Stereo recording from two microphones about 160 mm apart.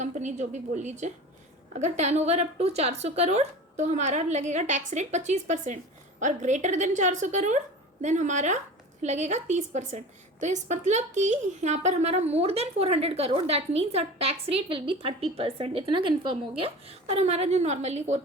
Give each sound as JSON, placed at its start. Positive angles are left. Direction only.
{"t": 0.0, "sound": "a woman's voice", "side_deg": -50}